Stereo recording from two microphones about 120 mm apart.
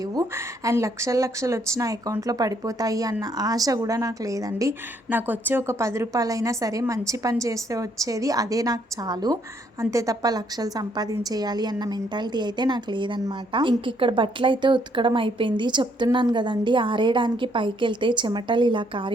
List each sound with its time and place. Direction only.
0.0 s speech: 30° right (ahead or behind)
5.0 s a woman's voice: 15° right (ahead or behind); by 19.1 s 45° right (ahead or behind)